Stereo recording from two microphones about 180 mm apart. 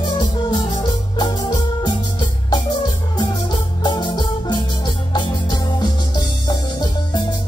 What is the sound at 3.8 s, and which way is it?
Music, 25° left (ahead or behind).